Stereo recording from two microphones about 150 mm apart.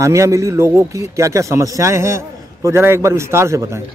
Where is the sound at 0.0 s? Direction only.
20° right (ahead or behind).